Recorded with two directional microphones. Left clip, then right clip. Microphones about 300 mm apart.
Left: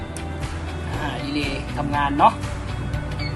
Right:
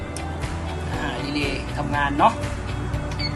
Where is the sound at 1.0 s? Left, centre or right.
Centre.